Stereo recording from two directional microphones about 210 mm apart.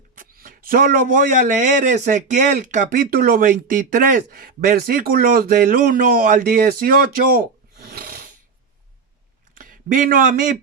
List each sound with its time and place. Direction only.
0.2 s speech: 40° right (ahead or behind)
9.6 s speech: 40° right (ahead or behind)